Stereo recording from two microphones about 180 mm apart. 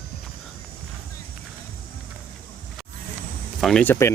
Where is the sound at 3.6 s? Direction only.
5° left (ahead or behind).